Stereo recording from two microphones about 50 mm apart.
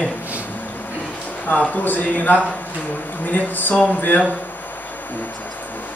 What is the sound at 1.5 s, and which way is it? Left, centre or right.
A man's voice, left.